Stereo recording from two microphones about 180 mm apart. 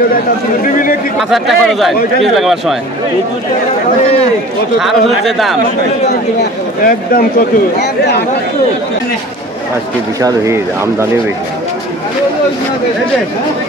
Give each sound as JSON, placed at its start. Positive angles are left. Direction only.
{"t": 1.3, "sound": "speech", "side_deg": 0}
{"t": 4.7, "sound": "speech", "side_deg": 0}
{"t": 6.8, "sound": "speech", "side_deg": 55}
{"t": 10.2, "sound": "speech", "side_deg": -15}